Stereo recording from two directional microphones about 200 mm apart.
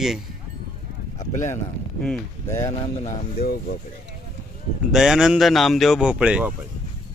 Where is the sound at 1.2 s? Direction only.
40° left (ahead or behind).